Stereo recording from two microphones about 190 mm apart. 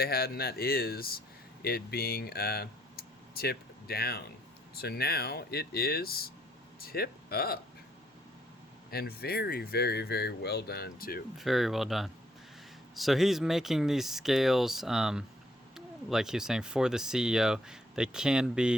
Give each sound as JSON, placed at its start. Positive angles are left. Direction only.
{"t": 0.0, "sound": "speech", "side_deg": 55}
{"t": 8.9, "sound": "speech", "side_deg": 55}
{"t": 11.3, "sound": "speech", "side_deg": 0}